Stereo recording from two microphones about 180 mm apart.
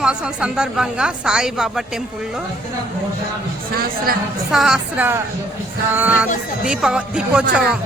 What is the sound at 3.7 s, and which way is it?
Speech, 55° right (ahead or behind).